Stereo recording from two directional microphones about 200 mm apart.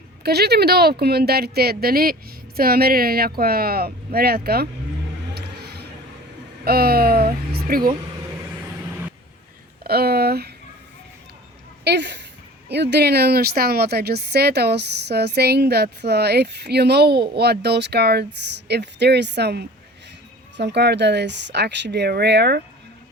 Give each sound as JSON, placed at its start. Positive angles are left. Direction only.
{"t": 0.2, "sound": "speech", "side_deg": -55}
{"t": 5.3, "sound": "music", "side_deg": -55}
{"t": 6.7, "sound": "speech", "side_deg": -50}
{"t": 9.8, "sound": "speech", "side_deg": -50}
{"t": 11.9, "sound": "speech", "side_deg": -60}